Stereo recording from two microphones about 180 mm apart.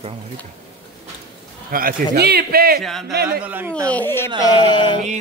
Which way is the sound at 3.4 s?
10° right (ahead or behind).